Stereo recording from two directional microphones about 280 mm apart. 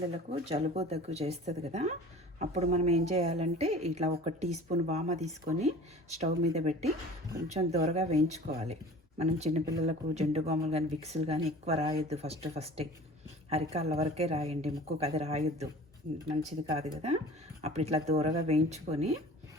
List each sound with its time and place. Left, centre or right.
0.0 s speech: right
16.6 s speech: centre